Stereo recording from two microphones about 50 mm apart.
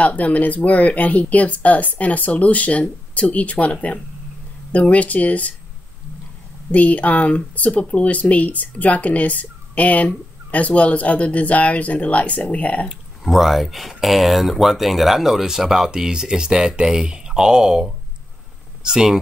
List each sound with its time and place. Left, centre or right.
0.0 s speech: left
6.7 s speech: left
13.2 s speech: centre